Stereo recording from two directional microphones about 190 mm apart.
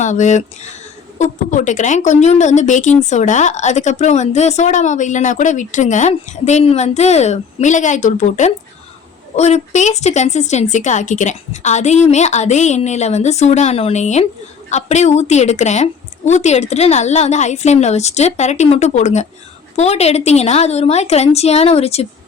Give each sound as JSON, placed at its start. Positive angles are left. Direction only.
{"t": 0.0, "sound": "a woman's voice", "side_deg": 40}